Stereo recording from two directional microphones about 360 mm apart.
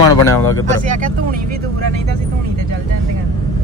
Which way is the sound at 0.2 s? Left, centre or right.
Centre.